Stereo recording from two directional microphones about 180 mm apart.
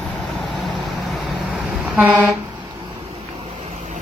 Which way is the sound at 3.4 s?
30° right (ahead or behind).